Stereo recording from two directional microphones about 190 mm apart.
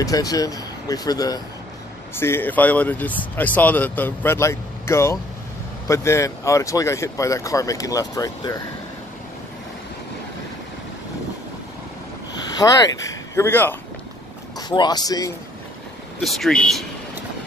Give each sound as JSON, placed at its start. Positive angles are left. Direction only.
{"t": 0.0, "sound": "speech", "side_deg": 20}
{"t": 12.5, "sound": "speech", "side_deg": 20}
{"t": 14.7, "sound": "speech", "side_deg": 20}
{"t": 16.2, "sound": "speech", "side_deg": 0}